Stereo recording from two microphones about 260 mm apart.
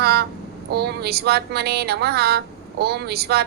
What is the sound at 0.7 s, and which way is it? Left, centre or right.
Speech, right.